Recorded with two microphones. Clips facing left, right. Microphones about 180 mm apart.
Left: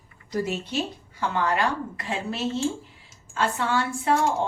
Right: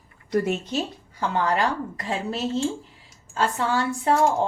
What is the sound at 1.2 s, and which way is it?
Speech, 35° right (ahead or behind).